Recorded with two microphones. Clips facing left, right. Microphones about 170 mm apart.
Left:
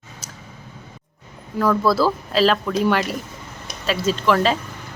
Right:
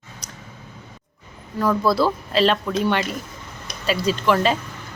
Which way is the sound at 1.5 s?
10° right (ahead or behind).